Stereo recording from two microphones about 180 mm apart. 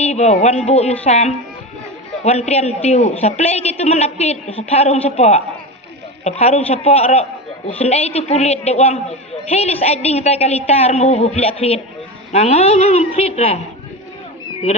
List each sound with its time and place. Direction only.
0.0 s a man's voice: 40° left (ahead or behind)